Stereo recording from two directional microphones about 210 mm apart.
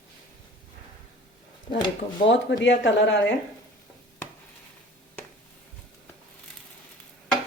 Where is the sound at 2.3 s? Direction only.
60° left (ahead or behind).